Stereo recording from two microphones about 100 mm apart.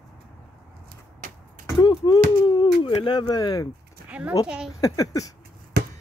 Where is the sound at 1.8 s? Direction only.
45° left (ahead or behind).